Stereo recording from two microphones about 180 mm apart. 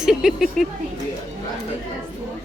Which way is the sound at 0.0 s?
5° right (ahead or behind).